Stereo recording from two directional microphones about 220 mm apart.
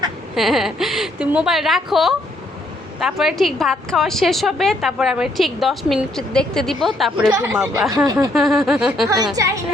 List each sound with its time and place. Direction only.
0.3 s a woman's voice: centre (ahead or behind)
7.3 s speech: 15° right (ahead or behind)
8.3 s a woman's voice: centre (ahead or behind)
9.0 s speech: 15° right (ahead or behind)